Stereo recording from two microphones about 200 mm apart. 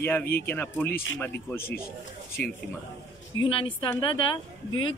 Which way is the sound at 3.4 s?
25° left (ahead or behind).